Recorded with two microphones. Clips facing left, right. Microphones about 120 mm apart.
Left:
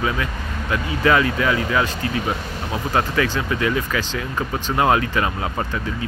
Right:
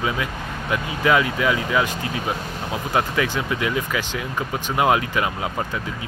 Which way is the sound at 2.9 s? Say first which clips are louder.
Left 1 dB; 15° right (ahead or behind).